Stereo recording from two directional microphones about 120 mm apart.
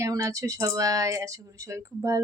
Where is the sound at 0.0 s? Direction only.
25° right (ahead or behind).